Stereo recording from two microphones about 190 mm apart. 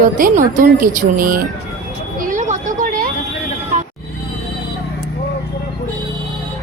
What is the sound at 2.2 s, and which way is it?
Vehicle, 40° right (ahead or behind).